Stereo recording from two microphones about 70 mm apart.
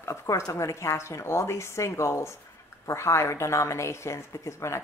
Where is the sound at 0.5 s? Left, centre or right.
Left.